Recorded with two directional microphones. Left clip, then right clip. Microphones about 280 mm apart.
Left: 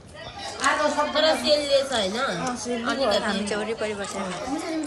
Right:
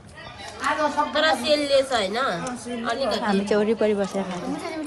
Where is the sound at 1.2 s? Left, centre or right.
Right.